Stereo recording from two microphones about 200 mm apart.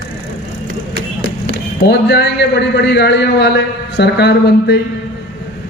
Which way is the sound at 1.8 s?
55° left (ahead or behind).